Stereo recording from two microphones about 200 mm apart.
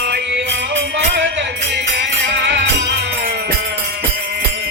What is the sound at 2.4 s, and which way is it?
Music, 60° right (ahead or behind).